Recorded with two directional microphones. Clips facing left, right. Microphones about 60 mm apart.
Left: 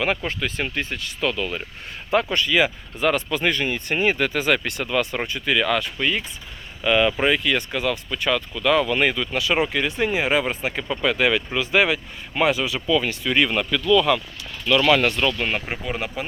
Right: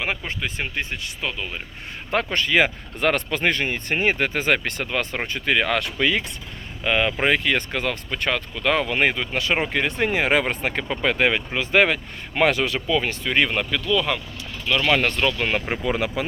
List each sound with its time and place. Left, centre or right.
0.3 s speech: right
2.1 s speech: right
5.8 s speech: right
6.8 s speech: right
11.0 s speech: right
12.9 s speech: right
15.0 s speech: right
15.4 s speech: right